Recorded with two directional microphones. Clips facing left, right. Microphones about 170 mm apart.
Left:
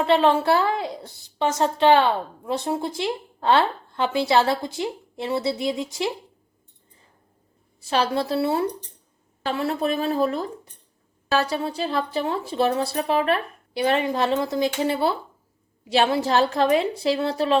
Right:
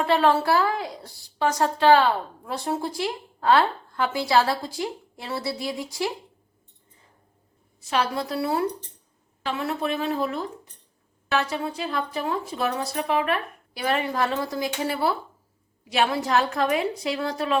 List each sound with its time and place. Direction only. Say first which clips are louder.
0.0 s a woman's voice: left 2 dB; 20° left (ahead or behind)
7.8 s a woman's voice: left 3 dB; 30° left (ahead or behind)